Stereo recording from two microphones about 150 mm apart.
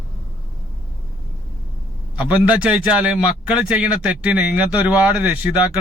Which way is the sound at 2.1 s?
10° right (ahead or behind).